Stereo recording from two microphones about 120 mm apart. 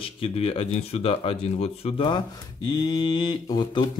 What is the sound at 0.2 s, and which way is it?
Speech, 55° left (ahead or behind).